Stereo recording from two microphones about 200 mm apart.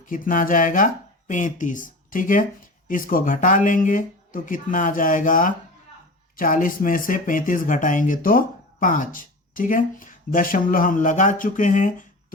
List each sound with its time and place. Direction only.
0.0 s speech: 40° left (ahead or behind)